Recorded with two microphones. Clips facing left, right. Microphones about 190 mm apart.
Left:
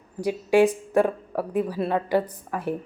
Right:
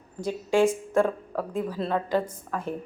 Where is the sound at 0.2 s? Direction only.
15° left (ahead or behind).